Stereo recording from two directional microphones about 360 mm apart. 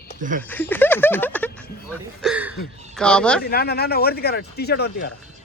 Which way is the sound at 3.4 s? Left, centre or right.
Left.